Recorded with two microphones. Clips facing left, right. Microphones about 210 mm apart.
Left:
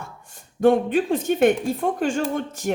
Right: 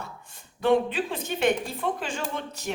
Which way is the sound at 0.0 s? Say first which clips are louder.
Left 1 dB; 45° left (ahead or behind).